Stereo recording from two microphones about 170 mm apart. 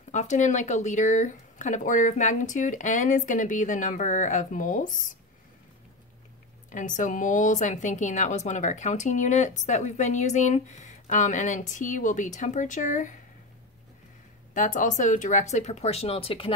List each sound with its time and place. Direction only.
0.1 s a woman's voice: 45° left (ahead or behind)
6.7 s a woman's voice: 50° left (ahead or behind)
14.5 s a woman's voice: 50° left (ahead or behind); by 16.5 s 35° left (ahead or behind)